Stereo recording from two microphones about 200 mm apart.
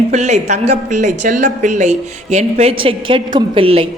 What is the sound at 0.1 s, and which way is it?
A woman's voice, 35° right (ahead or behind).